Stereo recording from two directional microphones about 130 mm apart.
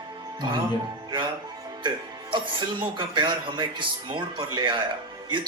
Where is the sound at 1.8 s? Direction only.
40° right (ahead or behind).